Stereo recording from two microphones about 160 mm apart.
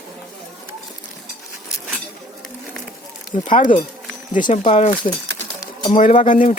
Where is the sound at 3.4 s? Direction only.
55° left (ahead or behind).